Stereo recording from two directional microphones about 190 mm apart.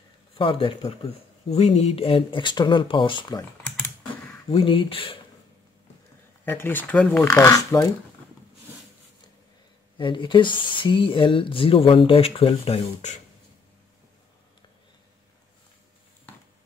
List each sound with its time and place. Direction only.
0.3 s speech: 25° left (ahead or behind)
4.5 s speech: 30° left (ahead or behind)
6.4 s speech: 10° left (ahead or behind)
9.9 s speech: 25° left (ahead or behind)